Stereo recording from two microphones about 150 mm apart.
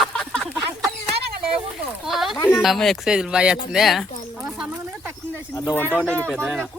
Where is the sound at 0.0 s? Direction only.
5° left (ahead or behind).